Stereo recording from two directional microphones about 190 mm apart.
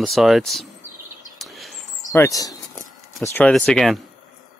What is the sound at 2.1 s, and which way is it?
Speech, 15° left (ahead or behind).